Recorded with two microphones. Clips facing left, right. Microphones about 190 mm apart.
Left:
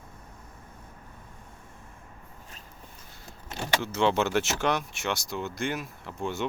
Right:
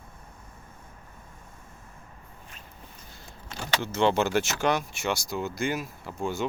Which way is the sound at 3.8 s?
Centre (ahead or behind).